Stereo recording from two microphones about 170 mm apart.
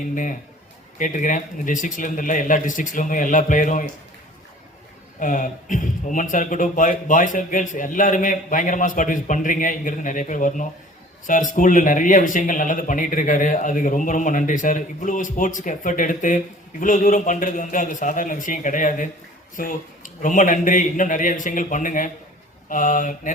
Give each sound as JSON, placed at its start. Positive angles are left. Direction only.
{"t": 0.1, "sound": "a man's voice", "side_deg": 50}
{"t": 5.2, "sound": "a man's voice", "side_deg": 50}